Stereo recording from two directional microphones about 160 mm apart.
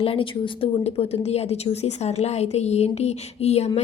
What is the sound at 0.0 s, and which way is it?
A woman's voice, 35° left (ahead or behind).